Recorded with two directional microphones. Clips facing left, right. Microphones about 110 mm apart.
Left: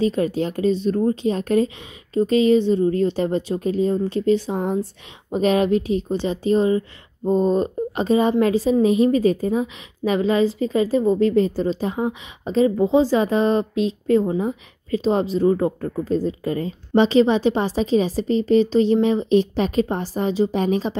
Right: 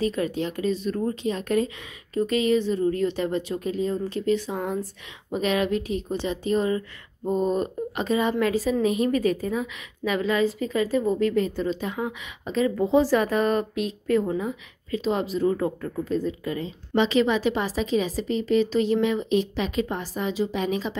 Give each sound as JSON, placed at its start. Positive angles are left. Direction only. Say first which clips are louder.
{"t": 0.0, "sound": "a woman's voice", "louder": "left 5 dB", "side_deg": 35}